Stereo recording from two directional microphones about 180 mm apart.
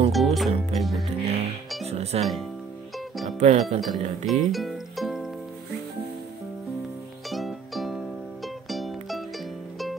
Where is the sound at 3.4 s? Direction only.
40° right (ahead or behind).